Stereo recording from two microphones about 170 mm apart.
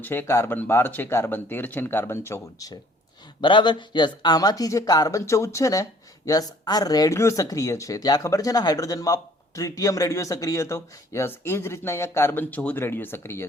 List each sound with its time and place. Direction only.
0.0 s speech: 15° left (ahead or behind)